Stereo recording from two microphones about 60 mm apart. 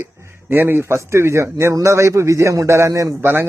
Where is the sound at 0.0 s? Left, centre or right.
Right.